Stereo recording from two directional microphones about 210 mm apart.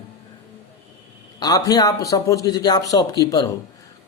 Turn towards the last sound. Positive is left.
turn(degrees=20)  # may be behind; listen again after turning